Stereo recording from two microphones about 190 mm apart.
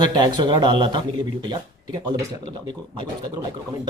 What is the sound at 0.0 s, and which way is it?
Speech, 25° right (ahead or behind).